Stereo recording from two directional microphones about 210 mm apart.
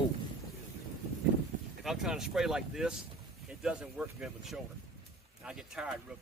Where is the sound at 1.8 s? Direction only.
Centre (ahead or behind).